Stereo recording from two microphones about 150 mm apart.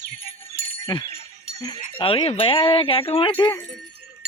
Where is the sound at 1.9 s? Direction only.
35° left (ahead or behind).